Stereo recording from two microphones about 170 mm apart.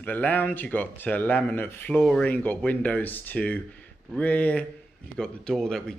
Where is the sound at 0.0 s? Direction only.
10° left (ahead or behind).